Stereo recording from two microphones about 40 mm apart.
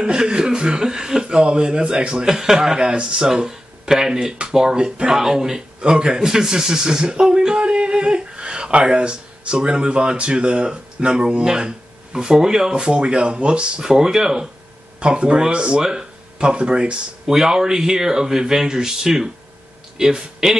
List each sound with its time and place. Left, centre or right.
0.0 s speech: right
5.8 s speech: right
12.7 s speech: right
15.0 s speech: right
15.8 s speech: centre
16.3 s speech: right
17.3 s speech: centre